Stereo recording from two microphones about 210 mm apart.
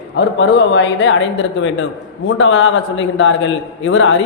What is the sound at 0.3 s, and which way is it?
A man's voice, 60° left (ahead or behind).